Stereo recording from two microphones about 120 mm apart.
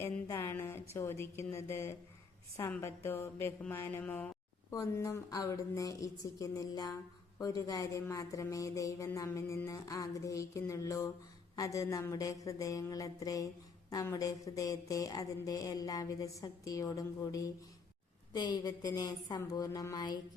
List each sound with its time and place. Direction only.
0.0 s speech: 20° left (ahead or behind)
3.6 s a sound: 20° left (ahead or behind)
4.7 s a woman's voice: 25° left (ahead or behind)